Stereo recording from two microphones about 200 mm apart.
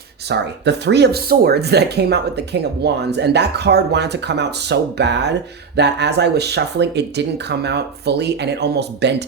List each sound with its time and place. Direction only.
0.3 s speech: 60° right (ahead or behind)